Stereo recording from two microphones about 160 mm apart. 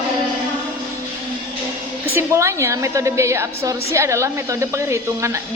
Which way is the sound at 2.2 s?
15° right (ahead or behind).